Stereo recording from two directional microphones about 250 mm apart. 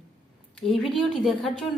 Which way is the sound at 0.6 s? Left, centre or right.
Centre.